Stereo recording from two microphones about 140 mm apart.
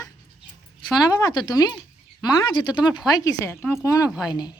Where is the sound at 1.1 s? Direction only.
30° left (ahead or behind).